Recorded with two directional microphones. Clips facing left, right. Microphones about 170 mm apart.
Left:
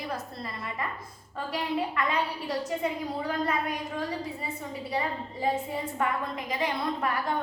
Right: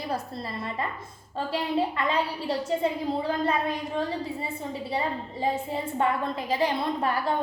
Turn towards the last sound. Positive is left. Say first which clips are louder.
# right 3 dB
turn(degrees=-30)  # may be behind; listen again after turning